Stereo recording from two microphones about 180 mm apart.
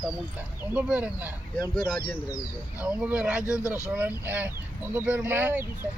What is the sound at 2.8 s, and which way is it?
Speech, 5° right (ahead or behind).